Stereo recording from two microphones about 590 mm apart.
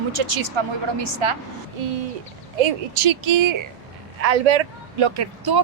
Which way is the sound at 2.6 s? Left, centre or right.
Right.